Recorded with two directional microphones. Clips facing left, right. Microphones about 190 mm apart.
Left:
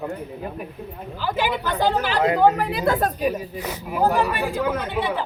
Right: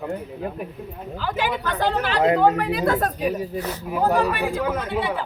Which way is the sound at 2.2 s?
25° right (ahead or behind).